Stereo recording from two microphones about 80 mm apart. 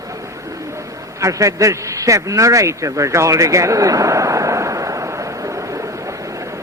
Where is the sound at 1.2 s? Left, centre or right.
Right.